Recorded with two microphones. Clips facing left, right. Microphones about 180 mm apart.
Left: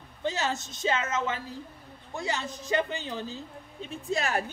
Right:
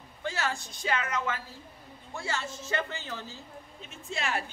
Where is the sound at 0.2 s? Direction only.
20° left (ahead or behind).